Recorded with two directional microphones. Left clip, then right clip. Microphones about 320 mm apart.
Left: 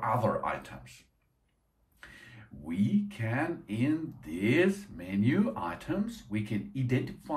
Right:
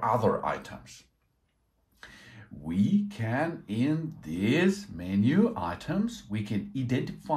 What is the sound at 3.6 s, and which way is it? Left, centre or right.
Speech, centre.